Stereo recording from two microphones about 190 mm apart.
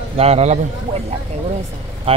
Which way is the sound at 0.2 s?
35° right (ahead or behind).